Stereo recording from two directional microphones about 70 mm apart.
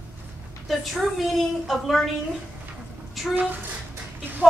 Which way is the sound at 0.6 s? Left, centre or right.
Centre.